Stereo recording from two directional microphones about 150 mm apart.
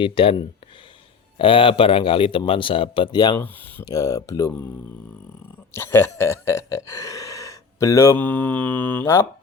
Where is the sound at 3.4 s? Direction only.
15° left (ahead or behind).